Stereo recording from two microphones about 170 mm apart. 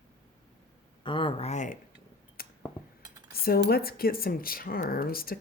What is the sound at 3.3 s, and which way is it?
Speech, 65° left (ahead or behind).